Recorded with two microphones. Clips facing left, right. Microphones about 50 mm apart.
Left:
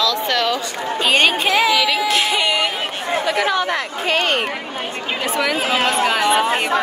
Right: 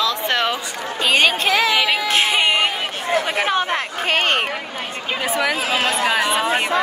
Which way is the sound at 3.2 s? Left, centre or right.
Right.